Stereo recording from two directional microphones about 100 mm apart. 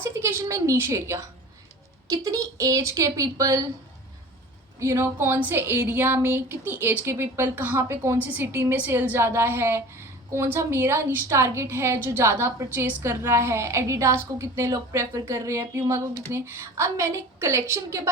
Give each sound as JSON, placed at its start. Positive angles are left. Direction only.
{"t": 0.0, "sound": "a woman's voice", "side_deg": -25}
{"t": 4.8, "sound": "a woman's voice", "side_deg": -30}